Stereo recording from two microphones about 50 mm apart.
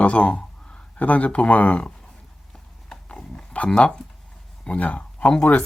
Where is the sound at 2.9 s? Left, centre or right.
Centre.